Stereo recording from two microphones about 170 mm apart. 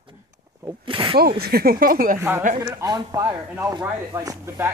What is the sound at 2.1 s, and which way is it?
Speech, 15° right (ahead or behind).